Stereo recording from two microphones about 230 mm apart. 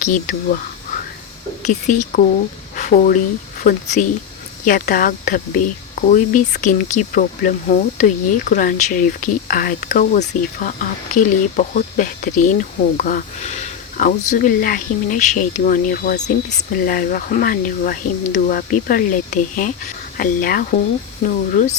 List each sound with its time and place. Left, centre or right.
0.0 s speech: left
1.6 s speech: left
2.7 s a sound: left
3.6 s speech: left